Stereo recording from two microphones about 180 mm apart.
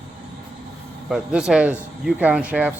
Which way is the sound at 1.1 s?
5° right (ahead or behind).